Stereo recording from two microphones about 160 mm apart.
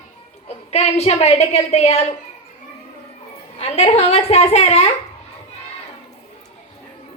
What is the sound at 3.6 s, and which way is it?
A woman's voice, 40° left (ahead or behind).